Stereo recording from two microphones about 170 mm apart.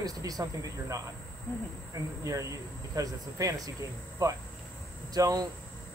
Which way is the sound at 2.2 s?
20° right (ahead or behind).